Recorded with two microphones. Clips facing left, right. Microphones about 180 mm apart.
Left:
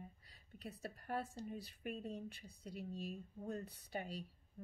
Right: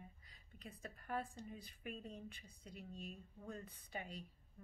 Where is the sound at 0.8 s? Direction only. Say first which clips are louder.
Left 1 dB; 35° left (ahead or behind).